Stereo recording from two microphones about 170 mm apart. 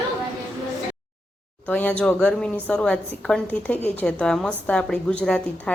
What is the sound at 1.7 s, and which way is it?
A woman's voice, 10° left (ahead or behind).